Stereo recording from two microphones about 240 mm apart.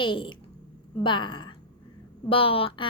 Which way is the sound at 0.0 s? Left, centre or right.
Left.